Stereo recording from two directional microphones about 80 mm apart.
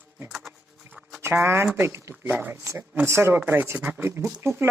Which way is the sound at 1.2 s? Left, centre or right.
Right.